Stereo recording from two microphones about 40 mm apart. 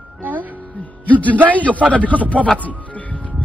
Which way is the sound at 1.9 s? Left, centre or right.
Left.